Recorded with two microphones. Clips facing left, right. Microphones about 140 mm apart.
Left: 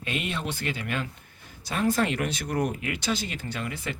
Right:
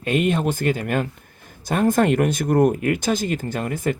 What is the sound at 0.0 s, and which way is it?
Speech, 50° right (ahead or behind).